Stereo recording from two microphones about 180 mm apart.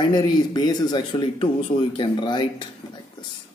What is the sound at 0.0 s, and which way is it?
A man's voice, 25° left (ahead or behind).